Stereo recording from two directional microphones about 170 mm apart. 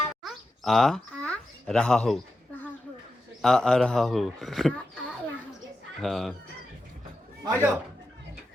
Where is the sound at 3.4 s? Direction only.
5° left (ahead or behind).